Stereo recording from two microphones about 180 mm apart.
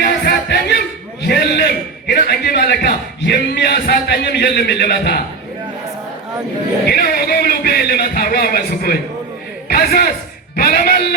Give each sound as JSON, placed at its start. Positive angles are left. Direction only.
{"t": 0.0, "sound": "music", "side_deg": 65}
{"t": 1.3, "sound": "a sound", "side_deg": 65}
{"t": 6.8, "sound": "a man's voice", "side_deg": 60}